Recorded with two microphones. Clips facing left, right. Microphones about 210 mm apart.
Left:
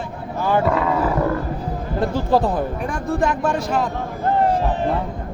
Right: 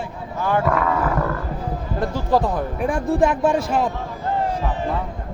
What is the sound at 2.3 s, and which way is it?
Speech, 30° left (ahead or behind).